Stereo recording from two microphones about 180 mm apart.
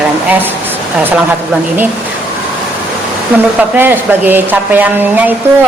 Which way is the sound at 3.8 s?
10° right (ahead or behind).